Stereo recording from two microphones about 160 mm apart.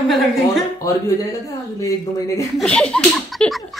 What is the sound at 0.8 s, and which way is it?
Speech, 20° left (ahead or behind).